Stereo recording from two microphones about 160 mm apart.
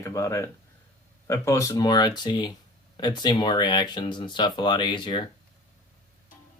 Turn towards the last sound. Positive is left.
turn(degrees=30)  # may be behind; listen again after turning